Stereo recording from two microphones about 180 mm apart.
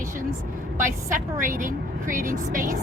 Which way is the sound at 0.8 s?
45° right (ahead or behind).